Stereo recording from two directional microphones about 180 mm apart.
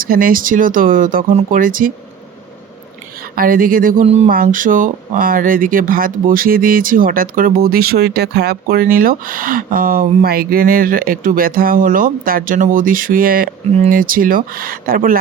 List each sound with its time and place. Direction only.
0.0 s speech: 50° right (ahead or behind)
3.3 s speech: 50° right (ahead or behind)
4.0 s a sound: 35° right (ahead or behind)
4.3 s speech: 50° right (ahead or behind)
13.7 s speech: 40° right (ahead or behind)